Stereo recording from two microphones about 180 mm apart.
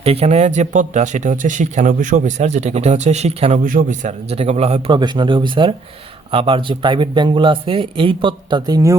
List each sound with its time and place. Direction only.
0.0 s speech: 35° right (ahead or behind)
4.9 s speech: 25° right (ahead or behind)